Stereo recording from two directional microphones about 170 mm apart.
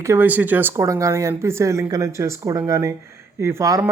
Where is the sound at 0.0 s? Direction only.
15° right (ahead or behind).